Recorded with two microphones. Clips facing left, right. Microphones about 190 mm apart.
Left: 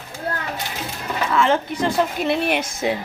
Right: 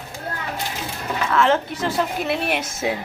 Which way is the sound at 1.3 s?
Centre (ahead or behind).